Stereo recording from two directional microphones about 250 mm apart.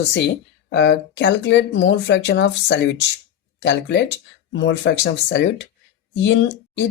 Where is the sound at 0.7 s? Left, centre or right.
Left.